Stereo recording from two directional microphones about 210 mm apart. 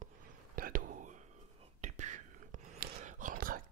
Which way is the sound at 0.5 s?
40° right (ahead or behind).